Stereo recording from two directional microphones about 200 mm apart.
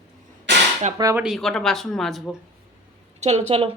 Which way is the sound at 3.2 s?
35° right (ahead or behind).